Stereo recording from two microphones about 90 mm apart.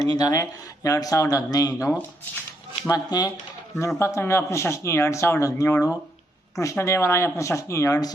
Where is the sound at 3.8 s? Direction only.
30° left (ahead or behind).